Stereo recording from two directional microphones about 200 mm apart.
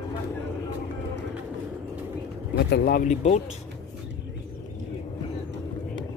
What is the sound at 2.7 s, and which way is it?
Speech, 50° left (ahead or behind).